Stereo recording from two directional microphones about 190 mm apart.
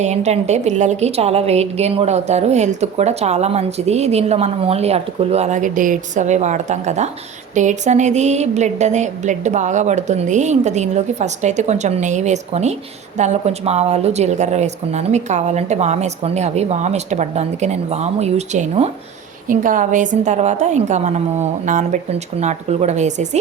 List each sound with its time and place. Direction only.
0.0 s a woman's voice: 35° right (ahead or behind)